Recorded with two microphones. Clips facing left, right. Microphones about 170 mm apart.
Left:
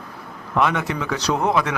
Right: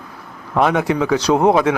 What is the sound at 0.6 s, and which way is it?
A man's voice, 30° right (ahead or behind).